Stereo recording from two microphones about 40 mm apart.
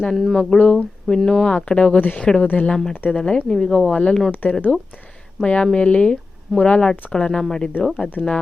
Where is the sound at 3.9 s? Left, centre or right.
Left.